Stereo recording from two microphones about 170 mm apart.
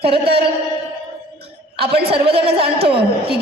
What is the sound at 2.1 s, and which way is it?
Speech, 35° right (ahead or behind).